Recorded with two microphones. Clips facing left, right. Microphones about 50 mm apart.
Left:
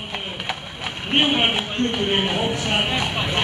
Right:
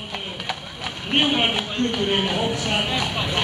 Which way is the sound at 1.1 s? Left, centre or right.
Centre.